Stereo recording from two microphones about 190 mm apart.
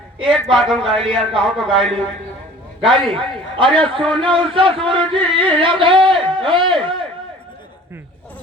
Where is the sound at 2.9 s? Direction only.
30° right (ahead or behind).